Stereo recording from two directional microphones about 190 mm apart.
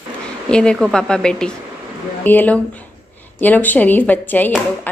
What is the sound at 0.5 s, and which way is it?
A woman's voice, 5° left (ahead or behind).